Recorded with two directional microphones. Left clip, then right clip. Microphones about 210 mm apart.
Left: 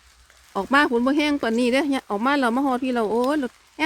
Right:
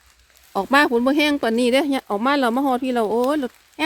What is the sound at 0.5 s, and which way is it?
Speech, 15° right (ahead or behind).